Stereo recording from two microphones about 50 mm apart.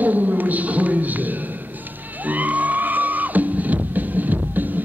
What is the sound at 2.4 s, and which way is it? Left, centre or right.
Music, right.